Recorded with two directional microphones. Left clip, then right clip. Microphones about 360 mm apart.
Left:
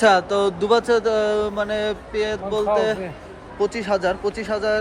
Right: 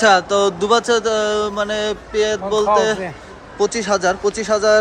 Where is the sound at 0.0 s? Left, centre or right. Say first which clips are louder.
Right 3 dB; centre.